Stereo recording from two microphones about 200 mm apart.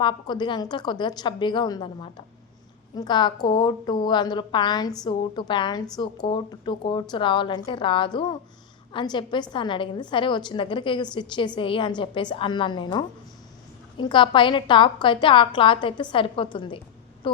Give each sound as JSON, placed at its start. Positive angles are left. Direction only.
{"t": 0.0, "sound": "a woman's voice", "side_deg": 20}